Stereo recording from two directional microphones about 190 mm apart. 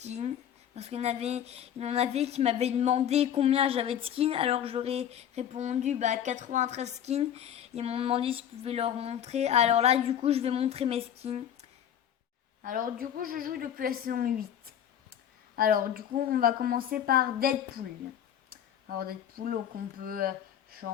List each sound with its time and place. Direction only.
0.0 s speech: 35° right (ahead or behind)
12.6 s a woman's voice: 45° right (ahead or behind)
15.5 s a woman's voice: 50° right (ahead or behind)
18.5 s a sound: 50° right (ahead or behind)
19.7 s a woman's voice: 50° right (ahead or behind)